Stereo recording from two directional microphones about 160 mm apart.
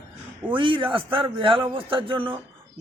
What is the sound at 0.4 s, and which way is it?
A man's voice, 30° right (ahead or behind).